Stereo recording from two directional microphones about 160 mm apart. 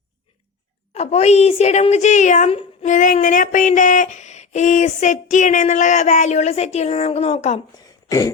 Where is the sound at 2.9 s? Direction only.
50° left (ahead or behind).